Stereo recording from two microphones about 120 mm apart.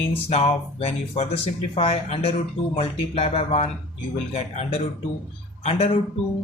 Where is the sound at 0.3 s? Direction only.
65° left (ahead or behind).